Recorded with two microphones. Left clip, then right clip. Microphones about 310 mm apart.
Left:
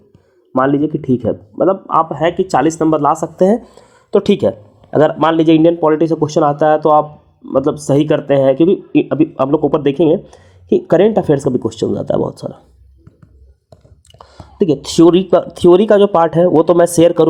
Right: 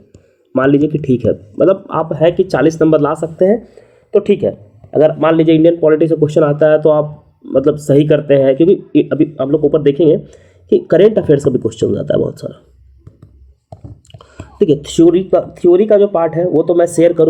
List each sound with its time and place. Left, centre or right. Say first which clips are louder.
0.5 s speech: right 2 dB; centre; by 4.4 s left
4.4 s speech: left 1 dB; left
5.2 s speech: right 1 dB; left
13.7 s a sound: right 7 dB; centre
15.1 s speech: left 1 dB; left